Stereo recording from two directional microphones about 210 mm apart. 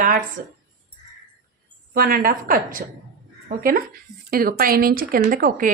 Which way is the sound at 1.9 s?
45° right (ahead or behind).